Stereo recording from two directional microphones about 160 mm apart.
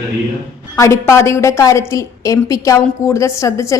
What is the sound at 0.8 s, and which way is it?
A woman's voice, 15° left (ahead or behind).